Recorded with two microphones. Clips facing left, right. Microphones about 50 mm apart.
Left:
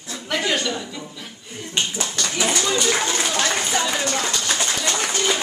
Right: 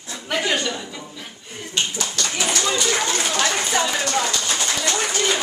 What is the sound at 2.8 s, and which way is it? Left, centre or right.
Speech, centre.